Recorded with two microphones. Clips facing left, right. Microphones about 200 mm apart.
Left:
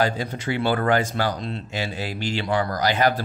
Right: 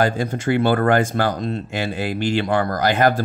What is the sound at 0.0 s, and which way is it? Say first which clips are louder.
Speech: right 4 dB; 50° right (ahead or behind).